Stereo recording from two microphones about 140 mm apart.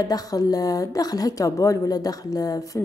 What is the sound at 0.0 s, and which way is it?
Speech, 25° left (ahead or behind).